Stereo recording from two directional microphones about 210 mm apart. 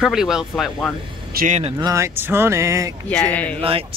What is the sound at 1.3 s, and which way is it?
Speech, 35° right (ahead or behind).